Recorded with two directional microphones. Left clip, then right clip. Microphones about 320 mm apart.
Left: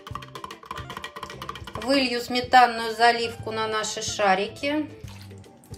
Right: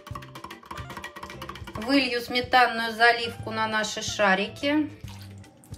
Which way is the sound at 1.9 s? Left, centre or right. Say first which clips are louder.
Left 1 dB; centre.